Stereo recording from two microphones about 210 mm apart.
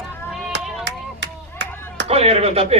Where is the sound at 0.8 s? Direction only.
55° right (ahead or behind).